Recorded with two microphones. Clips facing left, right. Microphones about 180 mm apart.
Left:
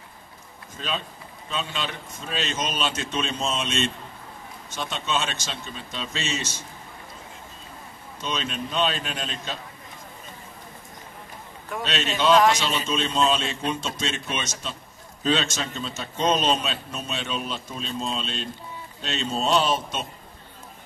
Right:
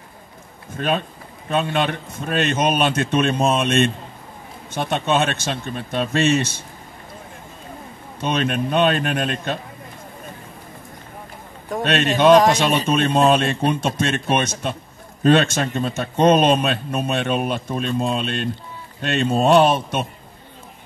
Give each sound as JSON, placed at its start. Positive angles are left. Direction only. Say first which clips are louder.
{"t": 0.7, "sound": "a man's voice", "louder": "right 9 dB", "side_deg": -60}
{"t": 8.2, "sound": "a man's voice", "louder": "right 9 dB", "side_deg": -60}
{"t": 11.8, "sound": "a man's voice", "louder": "right 9 dB", "side_deg": -60}